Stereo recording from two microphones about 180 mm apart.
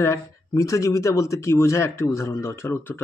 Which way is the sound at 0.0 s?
15° left (ahead or behind).